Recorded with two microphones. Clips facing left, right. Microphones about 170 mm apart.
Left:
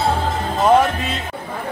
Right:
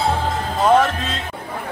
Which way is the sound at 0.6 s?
10° left (ahead or behind).